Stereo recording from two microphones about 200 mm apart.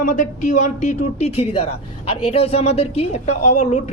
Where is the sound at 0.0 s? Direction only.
40° left (ahead or behind).